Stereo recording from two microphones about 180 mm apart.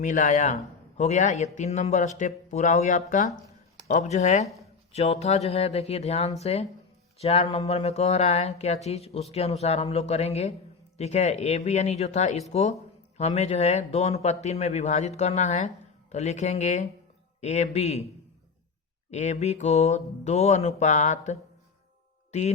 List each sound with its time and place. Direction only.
0.0 s a man's voice: 45° left (ahead or behind)
19.1 s a man's voice: 40° left (ahead or behind)
22.3 s music: 40° left (ahead or behind)